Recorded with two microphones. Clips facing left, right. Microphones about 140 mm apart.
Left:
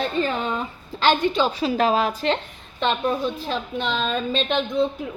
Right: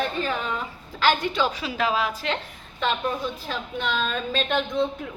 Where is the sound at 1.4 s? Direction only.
40° left (ahead or behind).